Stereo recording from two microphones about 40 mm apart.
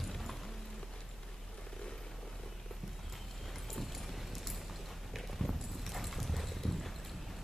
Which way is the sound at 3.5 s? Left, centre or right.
Centre.